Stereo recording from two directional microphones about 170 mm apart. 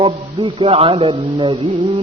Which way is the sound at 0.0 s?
30° right (ahead or behind).